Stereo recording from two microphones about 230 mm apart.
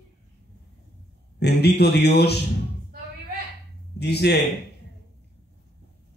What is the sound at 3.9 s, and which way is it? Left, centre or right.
Speech, left.